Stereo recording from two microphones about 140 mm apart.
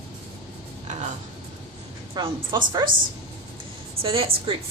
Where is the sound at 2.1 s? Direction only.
30° right (ahead or behind).